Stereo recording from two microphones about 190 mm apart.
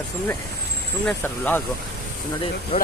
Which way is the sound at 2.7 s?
35° left (ahead or behind).